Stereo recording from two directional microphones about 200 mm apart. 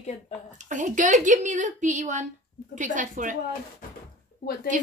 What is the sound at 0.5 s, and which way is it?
A woman's voice, 40° right (ahead or behind).